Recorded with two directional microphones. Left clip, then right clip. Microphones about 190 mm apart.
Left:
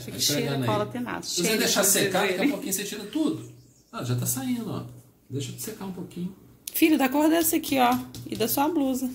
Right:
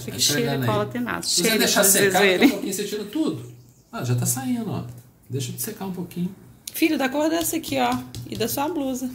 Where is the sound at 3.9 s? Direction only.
15° right (ahead or behind).